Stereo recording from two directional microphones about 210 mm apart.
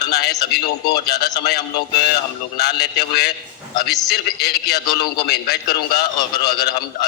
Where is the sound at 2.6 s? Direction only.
50° left (ahead or behind).